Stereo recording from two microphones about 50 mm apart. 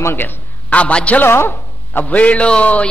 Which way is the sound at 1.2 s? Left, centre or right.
Left.